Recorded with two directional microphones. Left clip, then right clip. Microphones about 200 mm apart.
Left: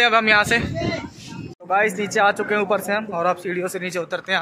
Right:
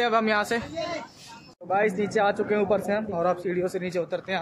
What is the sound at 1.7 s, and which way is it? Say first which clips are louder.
Speech: left 4 dB; 10° right (ahead or behind).